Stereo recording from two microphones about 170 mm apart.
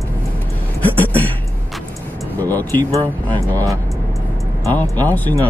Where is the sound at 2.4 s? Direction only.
10° left (ahead or behind).